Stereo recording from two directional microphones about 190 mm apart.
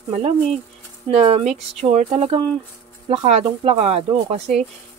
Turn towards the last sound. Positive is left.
turn(degrees=-35)  # may be behind; listen again after turning